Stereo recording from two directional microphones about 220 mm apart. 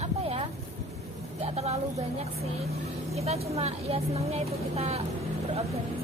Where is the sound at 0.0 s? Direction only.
25° right (ahead or behind).